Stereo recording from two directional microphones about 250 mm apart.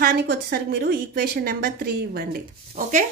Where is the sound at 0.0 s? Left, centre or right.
Right.